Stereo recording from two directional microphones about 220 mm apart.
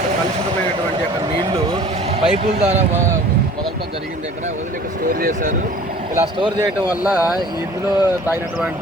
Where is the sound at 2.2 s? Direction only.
30° right (ahead or behind).